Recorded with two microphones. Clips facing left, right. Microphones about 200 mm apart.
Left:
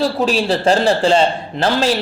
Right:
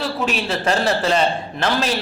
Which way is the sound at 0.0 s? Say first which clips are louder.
Left 6 dB; 35° left (ahead or behind).